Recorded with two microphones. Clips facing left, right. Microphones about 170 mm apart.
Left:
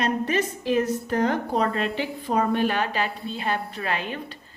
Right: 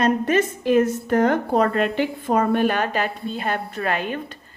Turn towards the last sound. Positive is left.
turn(degrees=-50)  # may be behind; listen again after turning